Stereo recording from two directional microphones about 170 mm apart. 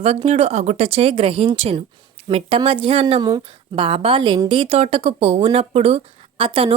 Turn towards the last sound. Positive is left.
turn(degrees=-30)  # may be behind; listen again after turning